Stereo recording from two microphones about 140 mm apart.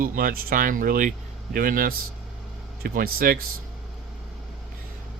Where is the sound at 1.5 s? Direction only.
90° right.